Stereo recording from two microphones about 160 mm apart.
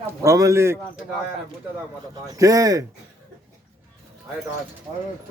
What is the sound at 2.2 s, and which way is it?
Speech, 20° right (ahead or behind).